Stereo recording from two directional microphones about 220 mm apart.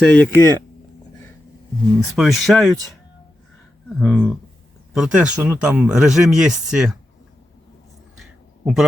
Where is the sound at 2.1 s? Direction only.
Centre (ahead or behind).